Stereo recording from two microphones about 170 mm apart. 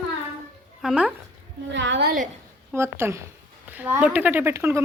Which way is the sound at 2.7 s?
15° right (ahead or behind).